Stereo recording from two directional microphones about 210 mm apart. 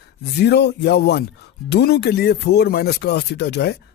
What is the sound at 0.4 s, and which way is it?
Speech, 55° left (ahead or behind).